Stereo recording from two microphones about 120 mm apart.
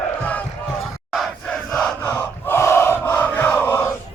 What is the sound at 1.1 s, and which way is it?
Crowd, centre (ahead or behind).